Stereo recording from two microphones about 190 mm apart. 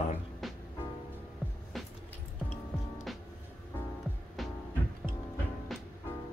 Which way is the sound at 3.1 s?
Centre (ahead or behind).